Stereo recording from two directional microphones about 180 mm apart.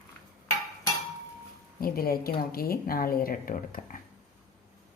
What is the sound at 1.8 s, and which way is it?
Speech, 55° left (ahead or behind).